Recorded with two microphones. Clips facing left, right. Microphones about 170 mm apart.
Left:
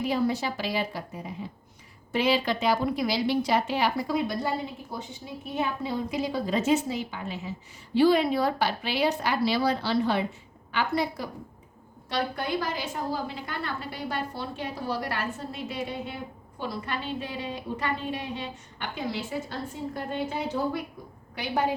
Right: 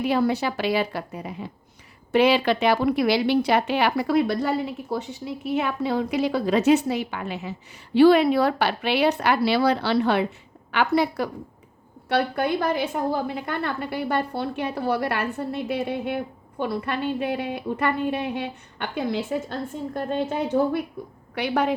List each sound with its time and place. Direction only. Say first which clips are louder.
0.0 s a woman's voice: right 4 dB; 70° right (ahead or behind)
20.3 s a woman's voice: right 10 dB; 55° right (ahead or behind)
21.3 s a woman's voice: right 4 dB; 70° right (ahead or behind)